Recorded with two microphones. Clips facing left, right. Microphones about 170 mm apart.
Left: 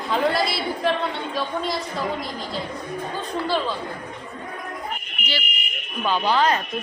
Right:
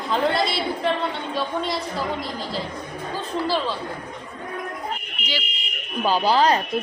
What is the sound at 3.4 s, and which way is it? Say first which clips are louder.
Speech: even; centre (ahead or behind).